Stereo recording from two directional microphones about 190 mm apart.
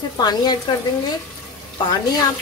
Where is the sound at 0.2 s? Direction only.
20° left (ahead or behind).